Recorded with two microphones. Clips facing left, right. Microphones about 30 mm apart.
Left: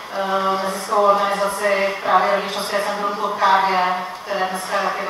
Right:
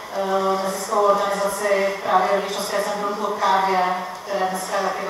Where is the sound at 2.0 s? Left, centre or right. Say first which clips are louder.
Left 2 dB; left.